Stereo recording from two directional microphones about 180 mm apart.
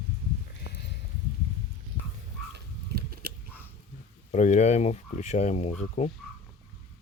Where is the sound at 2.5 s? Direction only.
60° right (ahead or behind).